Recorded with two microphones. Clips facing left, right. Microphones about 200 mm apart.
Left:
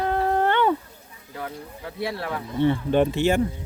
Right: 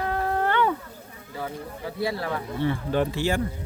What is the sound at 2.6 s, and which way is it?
Speech, 20° left (ahead or behind).